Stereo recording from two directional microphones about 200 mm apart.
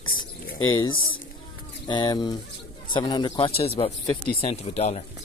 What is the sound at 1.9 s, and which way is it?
Speech, 20° left (ahead or behind).